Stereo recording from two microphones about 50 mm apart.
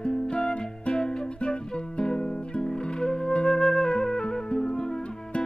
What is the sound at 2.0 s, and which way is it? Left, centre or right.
Flute, centre.